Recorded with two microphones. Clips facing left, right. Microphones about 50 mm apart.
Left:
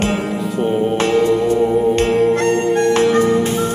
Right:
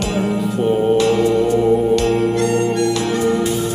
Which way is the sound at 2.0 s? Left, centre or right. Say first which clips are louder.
Left 2 dB; left.